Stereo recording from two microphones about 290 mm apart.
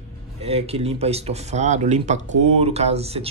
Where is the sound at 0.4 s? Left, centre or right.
Right.